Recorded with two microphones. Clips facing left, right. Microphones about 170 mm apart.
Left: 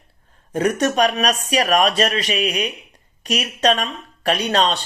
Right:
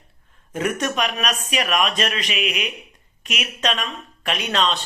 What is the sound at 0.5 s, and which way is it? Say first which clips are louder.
Speech: left 5 dB; 35° left (ahead or behind).